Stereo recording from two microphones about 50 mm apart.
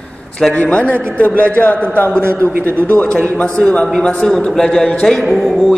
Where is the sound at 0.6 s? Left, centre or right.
Left; by 5.2 s centre.